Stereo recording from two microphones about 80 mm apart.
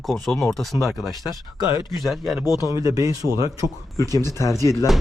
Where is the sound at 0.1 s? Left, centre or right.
Centre.